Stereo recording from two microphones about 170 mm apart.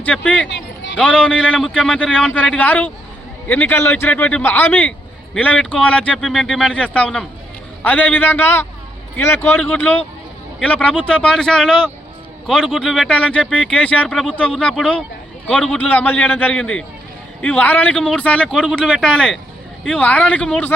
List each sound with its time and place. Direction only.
0.0 s a man's voice: 10° left (ahead or behind)
0.4 s a sound: 90° left
0.9 s a man's voice: 5° left (ahead or behind)